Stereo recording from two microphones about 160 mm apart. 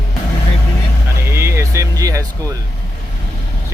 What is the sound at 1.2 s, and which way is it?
Music, 15° right (ahead or behind).